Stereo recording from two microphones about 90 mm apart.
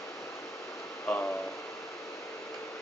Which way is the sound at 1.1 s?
25° left (ahead or behind).